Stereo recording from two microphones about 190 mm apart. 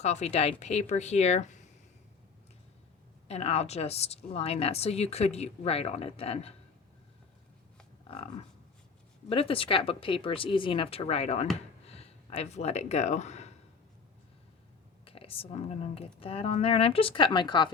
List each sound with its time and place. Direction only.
0.0 s a woman's voice: 35° left (ahead or behind)
3.2 s a woman's voice: 35° left (ahead or behind)
8.0 s cattle: 30° left (ahead or behind)
9.3 s speech: 30° left (ahead or behind)
15.0 s speech: 30° left (ahead or behind)